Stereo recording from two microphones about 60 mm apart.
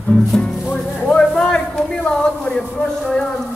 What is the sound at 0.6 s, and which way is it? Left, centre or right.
Music, centre.